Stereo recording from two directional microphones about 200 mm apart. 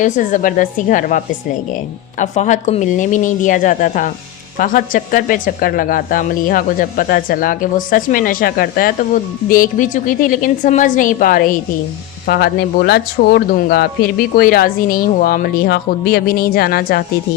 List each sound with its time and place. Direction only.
0.0 s speech: 40° left (ahead or behind)